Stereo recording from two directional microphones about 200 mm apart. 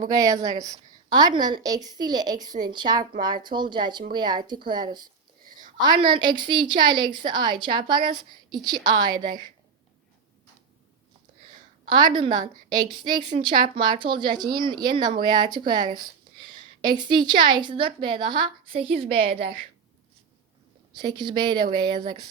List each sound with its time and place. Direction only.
0.0 s speech: 20° right (ahead or behind)
11.9 s speech: 20° right (ahead or behind)
20.9 s speech: 20° right (ahead or behind)